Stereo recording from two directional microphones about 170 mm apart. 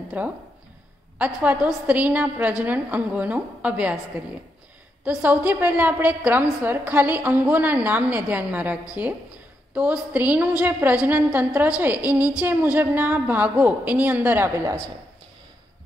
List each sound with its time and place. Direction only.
0.2 s a woman's voice: 10° right (ahead or behind)
5.0 s a woman's voice: 10° right (ahead or behind)